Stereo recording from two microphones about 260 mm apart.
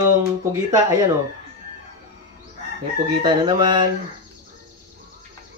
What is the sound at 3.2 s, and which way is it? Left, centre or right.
Speech, centre.